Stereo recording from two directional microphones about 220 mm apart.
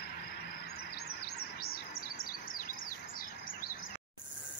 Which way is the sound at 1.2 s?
45° left (ahead or behind).